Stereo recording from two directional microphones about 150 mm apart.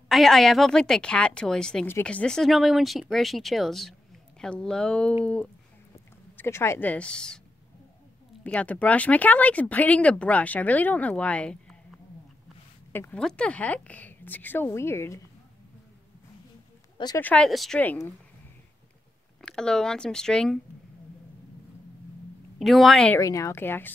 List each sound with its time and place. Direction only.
0.1 s speech: centre (ahead or behind)
8.5 s speech: 10° left (ahead or behind)
12.9 s speech: 15° left (ahead or behind)
17.2 s speech: 5° left (ahead or behind)
17.7 s speech: 15° left (ahead or behind)
19.4 s speech: 5° left (ahead or behind)
22.6 s speech: centre (ahead or behind)
23.1 s speech: 20° left (ahead or behind)